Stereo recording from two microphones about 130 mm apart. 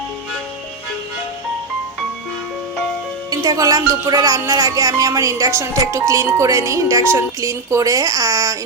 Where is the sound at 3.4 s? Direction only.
25° right (ahead or behind).